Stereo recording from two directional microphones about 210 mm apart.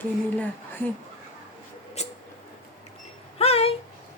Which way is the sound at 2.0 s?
30° left (ahead or behind).